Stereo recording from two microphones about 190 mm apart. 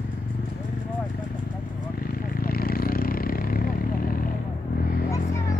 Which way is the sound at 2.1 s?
50° left (ahead or behind).